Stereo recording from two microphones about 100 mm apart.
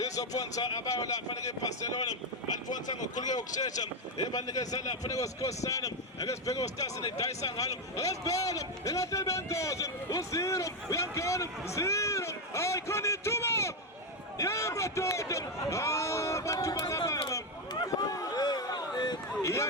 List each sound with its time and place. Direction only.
0.0 s a man's voice: 35° left (ahead or behind)
17.2 s a sound: 40° left (ahead or behind)
19.4 s a man's voice: 30° left (ahead or behind)